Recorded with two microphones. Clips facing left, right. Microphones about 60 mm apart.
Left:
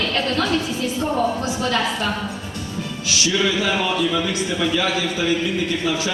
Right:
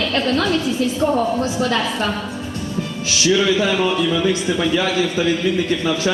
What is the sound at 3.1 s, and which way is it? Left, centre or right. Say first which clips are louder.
Speech: right 4 dB; right.